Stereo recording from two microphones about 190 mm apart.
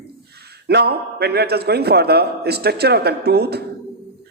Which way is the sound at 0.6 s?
55° right (ahead or behind).